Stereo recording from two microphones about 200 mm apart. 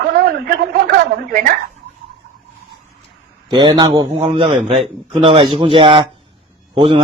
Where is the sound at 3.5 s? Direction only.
20° right (ahead or behind).